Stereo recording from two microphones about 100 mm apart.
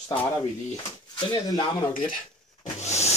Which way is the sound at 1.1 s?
45° left (ahead or behind).